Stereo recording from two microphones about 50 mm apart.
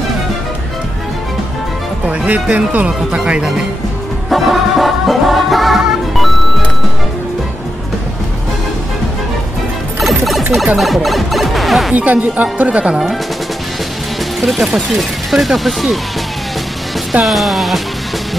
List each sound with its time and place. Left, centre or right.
2.0 s speech: right
4.3 s music: centre
9.9 s music: centre
10.8 s speech: centre
11.9 s speech: right
14.4 s speech: centre
17.2 s speech: centre